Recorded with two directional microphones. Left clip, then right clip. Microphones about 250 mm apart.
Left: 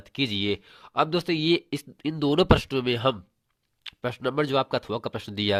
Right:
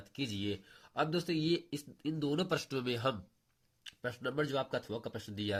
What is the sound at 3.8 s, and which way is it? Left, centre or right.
A man's voice, left.